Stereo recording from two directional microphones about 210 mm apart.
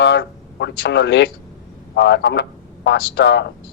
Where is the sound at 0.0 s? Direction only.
55° left (ahead or behind).